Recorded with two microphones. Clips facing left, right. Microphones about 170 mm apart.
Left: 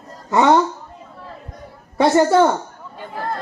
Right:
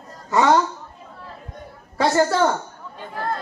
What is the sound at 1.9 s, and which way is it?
Speech, 20° left (ahead or behind).